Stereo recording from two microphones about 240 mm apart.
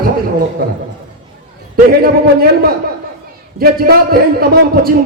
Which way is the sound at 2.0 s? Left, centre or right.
Right.